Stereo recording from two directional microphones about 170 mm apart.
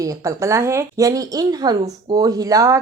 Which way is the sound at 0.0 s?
20° right (ahead or behind).